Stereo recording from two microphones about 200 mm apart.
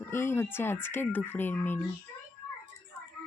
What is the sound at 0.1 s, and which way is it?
Speech, 10° left (ahead or behind).